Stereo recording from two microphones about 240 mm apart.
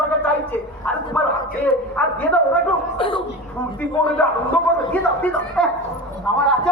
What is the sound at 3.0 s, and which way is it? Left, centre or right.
Speech, left.